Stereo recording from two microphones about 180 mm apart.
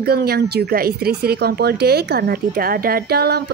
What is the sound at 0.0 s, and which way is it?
Speech, 60° right (ahead or behind).